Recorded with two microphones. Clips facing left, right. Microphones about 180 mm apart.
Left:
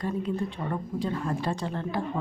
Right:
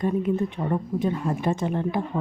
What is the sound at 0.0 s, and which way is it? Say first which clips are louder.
Speech: right 6 dB; 20° right (ahead or behind).